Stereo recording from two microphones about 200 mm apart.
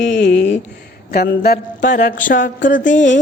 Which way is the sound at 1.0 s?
50° left (ahead or behind).